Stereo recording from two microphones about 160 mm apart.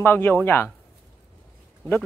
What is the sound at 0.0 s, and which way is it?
Speech, 15° left (ahead or behind).